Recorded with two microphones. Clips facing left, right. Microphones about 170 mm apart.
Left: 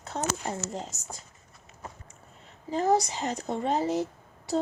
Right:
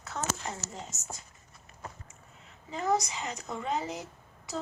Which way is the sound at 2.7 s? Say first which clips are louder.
Left 5 dB; 35° left (ahead or behind).